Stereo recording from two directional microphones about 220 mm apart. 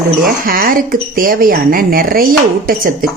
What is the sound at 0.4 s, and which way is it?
Speech, 40° right (ahead or behind).